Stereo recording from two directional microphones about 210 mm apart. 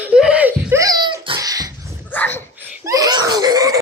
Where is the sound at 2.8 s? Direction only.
15° right (ahead or behind).